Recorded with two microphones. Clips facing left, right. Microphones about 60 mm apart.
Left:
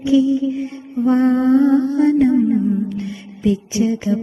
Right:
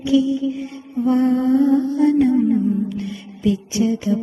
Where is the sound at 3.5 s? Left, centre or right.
Left.